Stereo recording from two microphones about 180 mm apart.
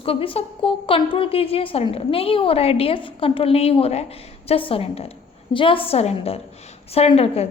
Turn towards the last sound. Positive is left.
turn(degrees=35)  # may be behind; listen again after turning